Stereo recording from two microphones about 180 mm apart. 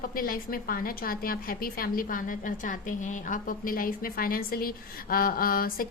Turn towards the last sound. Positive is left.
turn(degrees=50)  # may be behind; listen again after turning